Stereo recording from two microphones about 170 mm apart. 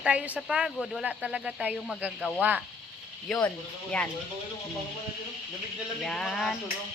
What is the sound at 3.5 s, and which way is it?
Speech, 10° left (ahead or behind).